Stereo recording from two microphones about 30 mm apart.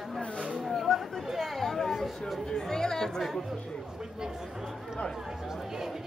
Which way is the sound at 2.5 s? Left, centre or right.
Left.